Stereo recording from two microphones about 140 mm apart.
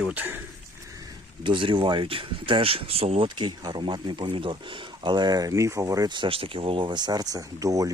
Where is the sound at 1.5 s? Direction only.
35° right (ahead or behind).